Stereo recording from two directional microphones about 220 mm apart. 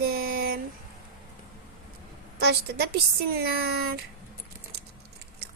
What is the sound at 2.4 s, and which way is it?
A woman's voice, 45° right (ahead or behind).